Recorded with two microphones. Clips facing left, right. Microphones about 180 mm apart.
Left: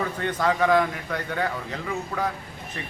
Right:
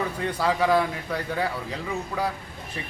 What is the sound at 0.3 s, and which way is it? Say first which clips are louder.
A man's voice: left 1 dB; 10° right (ahead or behind).